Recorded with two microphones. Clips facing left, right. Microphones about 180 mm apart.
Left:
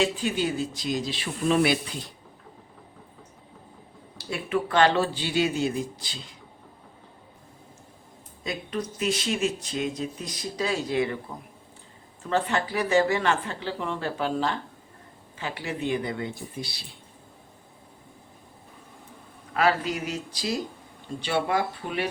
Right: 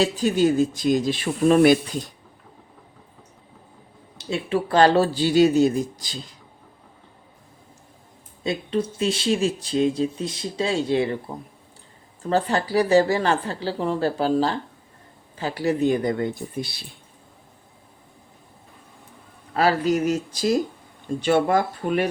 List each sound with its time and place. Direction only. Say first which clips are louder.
0.0 s speech: right 6 dB; 40° right (ahead or behind)
4.2 s speech: right 3 dB; 25° right (ahead or behind); by 6.3 s 40° right (ahead or behind)
8.4 s speech: right 7 dB; 30° right (ahead or behind)
12.3 s speech: right 5 dB; 35° right (ahead or behind); by 16.8 s 50° right (ahead or behind)
19.5 s speech: right 5 dB; 40° right (ahead or behind)